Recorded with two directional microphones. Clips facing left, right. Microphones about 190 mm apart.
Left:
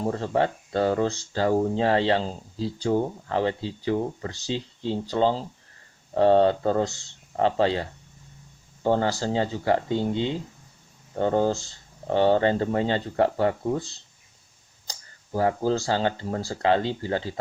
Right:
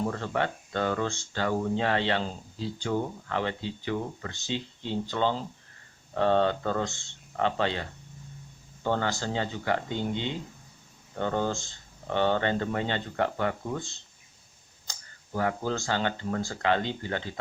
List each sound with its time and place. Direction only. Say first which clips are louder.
0.0 s speech: left 5 dB; 30° left (ahead or behind)